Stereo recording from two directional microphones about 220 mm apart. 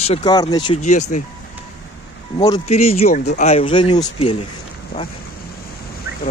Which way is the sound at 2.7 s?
30° left (ahead or behind).